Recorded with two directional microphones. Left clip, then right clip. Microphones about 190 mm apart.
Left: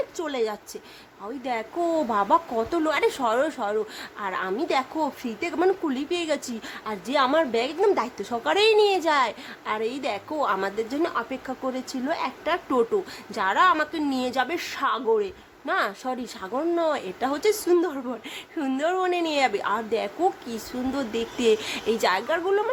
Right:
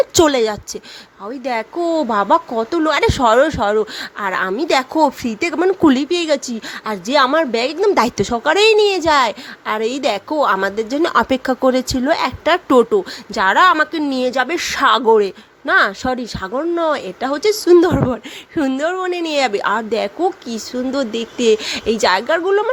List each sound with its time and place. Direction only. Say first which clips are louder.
0.1 s a woman's voice: right 14 dB; 40° right (ahead or behind); by 7.9 s 25° right (ahead or behind)
7.9 s speech: right 12 dB; 40° right (ahead or behind)
11.1 s speech: right 14 dB; 50° right (ahead or behind); by 17.6 s 20° right (ahead or behind)
17.7 s speech: right 12 dB; 35° right (ahead or behind)
18.8 s a woman's voice: right 5 dB; 15° right (ahead or behind)